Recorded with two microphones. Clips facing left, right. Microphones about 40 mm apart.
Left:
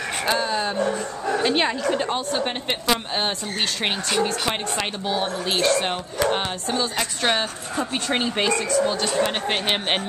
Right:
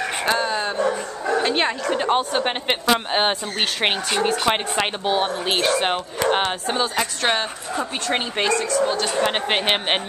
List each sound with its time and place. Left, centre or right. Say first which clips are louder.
0.3 s a woman's voice: even; centre
2.0 s a woman's voice: right 4 dB; right; by 9.2 s centre
9.2 s speech: right 4 dB; right